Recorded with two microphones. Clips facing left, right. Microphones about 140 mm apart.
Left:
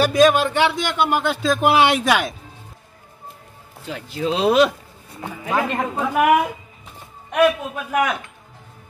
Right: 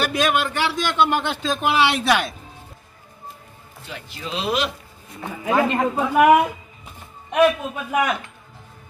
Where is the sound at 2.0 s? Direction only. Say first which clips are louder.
Left 1 dB; 10° left (ahead or behind).